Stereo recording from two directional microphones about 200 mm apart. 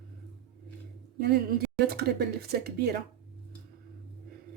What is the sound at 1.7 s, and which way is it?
Speech, 50° right (ahead or behind).